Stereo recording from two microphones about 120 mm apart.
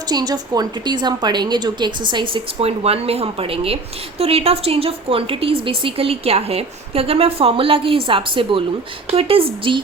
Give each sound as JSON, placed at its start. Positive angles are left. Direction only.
{"t": 0.1, "sound": "a woman's voice", "side_deg": -35}
{"t": 2.6, "sound": "speech", "side_deg": -55}